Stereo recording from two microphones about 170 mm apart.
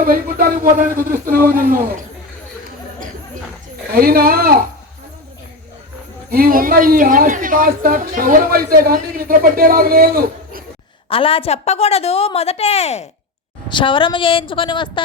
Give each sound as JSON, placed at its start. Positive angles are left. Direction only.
{"t": 0.0, "sound": "a woman's voice", "side_deg": -60}
{"t": 3.9, "sound": "a woman's voice", "side_deg": -60}
{"t": 6.3, "sound": "a woman's voice", "side_deg": -55}
{"t": 11.1, "sound": "a woman's voice", "side_deg": 35}
{"t": 13.7, "sound": "a woman's voice", "side_deg": 30}